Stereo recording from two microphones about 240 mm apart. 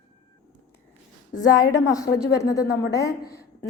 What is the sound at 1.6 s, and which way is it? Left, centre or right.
A woman's voice, centre.